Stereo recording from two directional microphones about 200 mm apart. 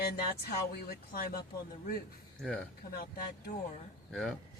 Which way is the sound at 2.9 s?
50° left (ahead or behind).